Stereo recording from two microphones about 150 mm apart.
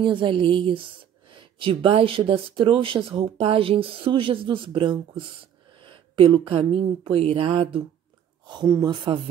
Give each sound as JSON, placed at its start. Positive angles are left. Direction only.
{"t": 0.0, "sound": "speech", "side_deg": -35}
{"t": 8.6, "sound": "speech", "side_deg": -20}
{"t": 8.9, "sound": "speech", "side_deg": -35}